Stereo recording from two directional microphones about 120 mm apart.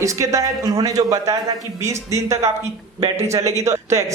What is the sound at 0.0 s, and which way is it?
Speech, 25° right (ahead or behind).